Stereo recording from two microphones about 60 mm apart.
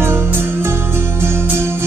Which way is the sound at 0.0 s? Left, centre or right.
Right.